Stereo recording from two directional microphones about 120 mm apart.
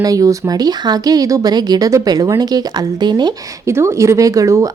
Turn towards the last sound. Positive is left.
turn(degrees=-25)  # may be behind; listen again after turning